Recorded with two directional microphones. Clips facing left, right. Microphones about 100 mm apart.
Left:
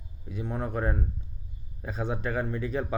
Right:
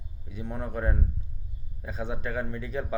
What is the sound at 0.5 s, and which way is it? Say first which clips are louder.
Speech: left 1 dB; 30° left (ahead or behind).